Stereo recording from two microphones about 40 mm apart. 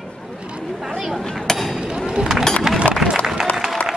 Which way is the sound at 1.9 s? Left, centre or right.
Centre.